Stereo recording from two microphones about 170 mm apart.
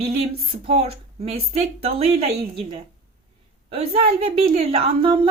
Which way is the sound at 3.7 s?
35° right (ahead or behind).